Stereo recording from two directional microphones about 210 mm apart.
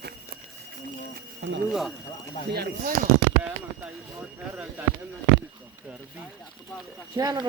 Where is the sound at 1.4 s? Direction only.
55° right (ahead or behind).